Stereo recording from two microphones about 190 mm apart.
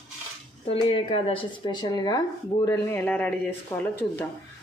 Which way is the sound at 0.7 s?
30° left (ahead or behind).